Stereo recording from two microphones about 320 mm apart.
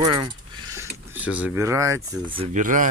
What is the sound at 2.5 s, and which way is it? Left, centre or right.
Speech, right.